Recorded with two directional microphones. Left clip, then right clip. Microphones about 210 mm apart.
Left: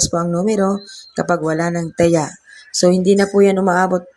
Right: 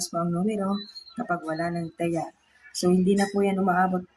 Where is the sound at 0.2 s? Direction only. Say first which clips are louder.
Left 6 dB; 35° left (ahead or behind).